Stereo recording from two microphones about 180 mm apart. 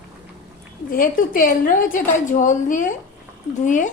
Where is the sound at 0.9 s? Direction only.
50° left (ahead or behind).